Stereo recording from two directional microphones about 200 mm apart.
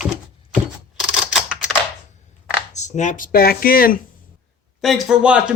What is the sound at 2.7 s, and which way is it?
Speech, 35° left (ahead or behind).